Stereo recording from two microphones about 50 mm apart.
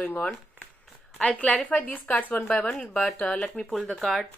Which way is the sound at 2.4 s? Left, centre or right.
Left.